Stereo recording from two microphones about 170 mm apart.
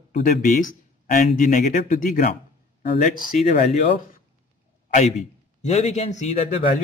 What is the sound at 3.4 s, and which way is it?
Speech, 45° left (ahead or behind).